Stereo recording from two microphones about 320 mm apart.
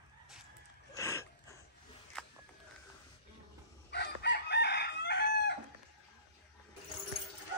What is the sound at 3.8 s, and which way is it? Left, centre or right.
Chicken, left.